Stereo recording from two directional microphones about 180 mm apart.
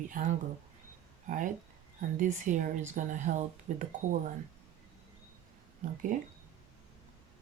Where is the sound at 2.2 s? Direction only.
45° right (ahead or behind).